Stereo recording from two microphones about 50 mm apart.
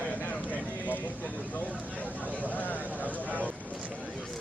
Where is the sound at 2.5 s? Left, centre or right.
Left.